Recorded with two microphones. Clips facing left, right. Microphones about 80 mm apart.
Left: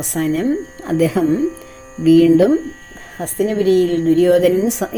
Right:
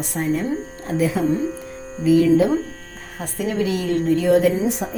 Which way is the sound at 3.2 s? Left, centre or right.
Left.